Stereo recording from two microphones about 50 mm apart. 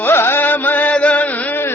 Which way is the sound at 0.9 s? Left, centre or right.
Left.